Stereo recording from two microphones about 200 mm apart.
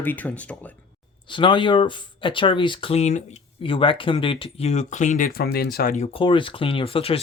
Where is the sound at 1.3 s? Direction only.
25° left (ahead or behind); by 6.1 s 45° left (ahead or behind).